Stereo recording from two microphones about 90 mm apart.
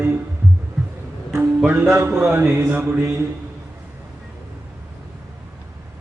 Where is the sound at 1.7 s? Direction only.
30° right (ahead or behind).